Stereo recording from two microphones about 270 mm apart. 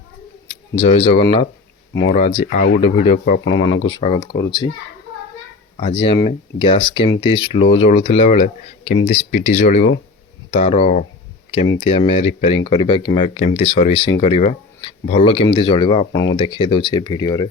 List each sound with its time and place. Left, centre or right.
0.8 s speech: left
1.9 s speech: left
2.1 s speech: left
3.9 s speech: centre
6.0 s speech: centre